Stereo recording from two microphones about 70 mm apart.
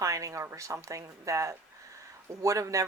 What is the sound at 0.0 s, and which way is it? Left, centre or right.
Speech, right.